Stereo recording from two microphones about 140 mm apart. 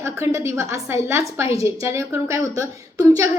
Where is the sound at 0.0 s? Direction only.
20° right (ahead or behind).